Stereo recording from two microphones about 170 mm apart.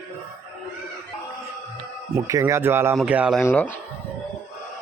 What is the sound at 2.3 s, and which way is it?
A man's voice, 20° right (ahead or behind).